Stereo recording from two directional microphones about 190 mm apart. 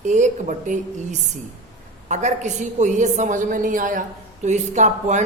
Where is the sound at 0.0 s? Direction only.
40° right (ahead or behind).